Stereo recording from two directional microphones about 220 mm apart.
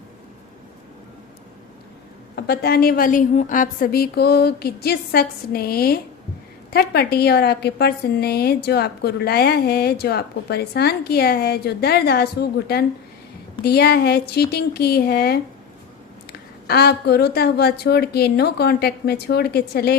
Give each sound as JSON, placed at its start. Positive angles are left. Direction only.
{"t": 2.3, "sound": "a woman's voice", "side_deg": 45}
{"t": 16.6, "sound": "a woman's voice", "side_deg": 45}